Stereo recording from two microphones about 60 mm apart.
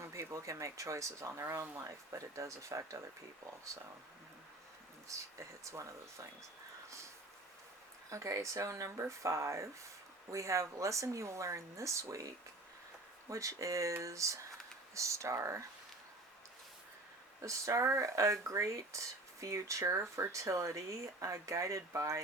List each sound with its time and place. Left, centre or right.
0.0 s speech: right
1.8 s speech: right
5.0 s speech: right
8.1 s speech: right
17.4 s speech: right